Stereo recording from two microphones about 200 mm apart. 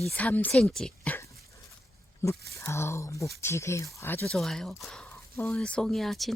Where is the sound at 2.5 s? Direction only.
15° left (ahead or behind).